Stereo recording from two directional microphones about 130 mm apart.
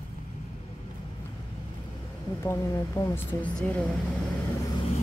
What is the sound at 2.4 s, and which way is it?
Speech, 25° left (ahead or behind).